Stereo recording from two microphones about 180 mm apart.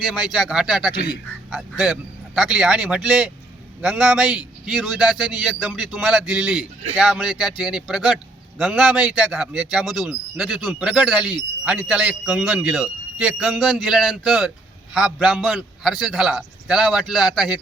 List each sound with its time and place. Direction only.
0.1 s a man's voice: centre (ahead or behind)